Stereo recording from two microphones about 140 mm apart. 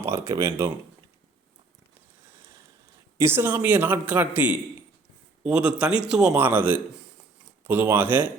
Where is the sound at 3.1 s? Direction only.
20° right (ahead or behind).